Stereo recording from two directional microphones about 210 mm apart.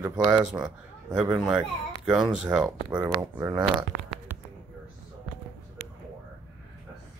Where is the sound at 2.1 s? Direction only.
5° right (ahead or behind).